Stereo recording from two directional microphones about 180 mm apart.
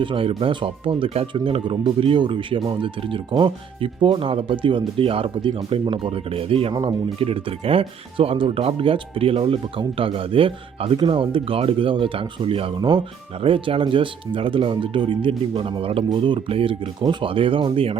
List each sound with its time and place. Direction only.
0.0 s speech: 30° right (ahead or behind)